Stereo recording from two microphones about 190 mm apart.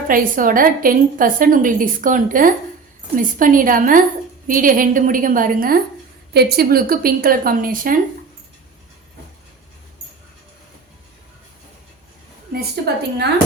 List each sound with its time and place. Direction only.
0.1 s a woman's voice: 45° right (ahead or behind)
12.5 s a woman's voice: 55° right (ahead or behind)